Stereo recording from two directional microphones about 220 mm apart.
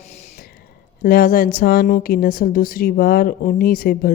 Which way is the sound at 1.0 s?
40° left (ahead or behind).